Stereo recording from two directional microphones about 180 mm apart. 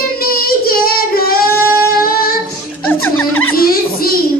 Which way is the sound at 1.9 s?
55° left (ahead or behind).